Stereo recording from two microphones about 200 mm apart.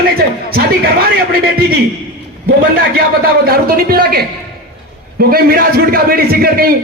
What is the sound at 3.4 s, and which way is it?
Speech, 50° right (ahead or behind).